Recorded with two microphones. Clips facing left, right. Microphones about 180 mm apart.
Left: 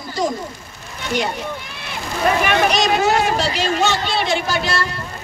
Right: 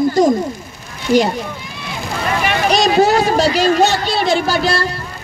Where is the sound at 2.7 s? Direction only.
35° right (ahead or behind).